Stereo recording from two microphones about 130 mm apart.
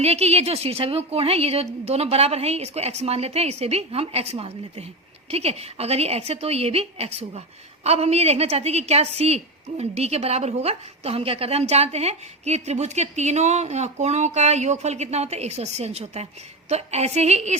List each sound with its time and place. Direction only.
0.0 s a woman's voice: 55° right (ahead or behind)